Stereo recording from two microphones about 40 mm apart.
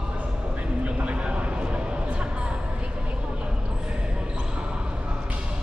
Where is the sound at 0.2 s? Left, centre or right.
Right.